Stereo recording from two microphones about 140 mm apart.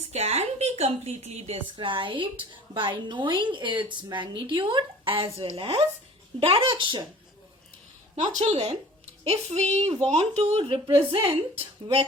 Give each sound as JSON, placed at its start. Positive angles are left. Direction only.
{"t": 0.1, "sound": "a woman's voice", "side_deg": -50}
{"t": 1.7, "sound": "a woman's voice", "side_deg": -40}
{"t": 8.1, "sound": "a woman's voice", "side_deg": -55}